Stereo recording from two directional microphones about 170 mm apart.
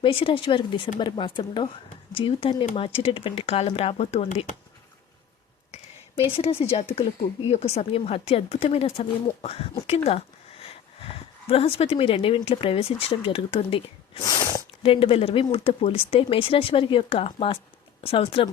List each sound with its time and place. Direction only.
0.0 s speech: 30° left (ahead or behind)
5.7 s speech: 35° left (ahead or behind)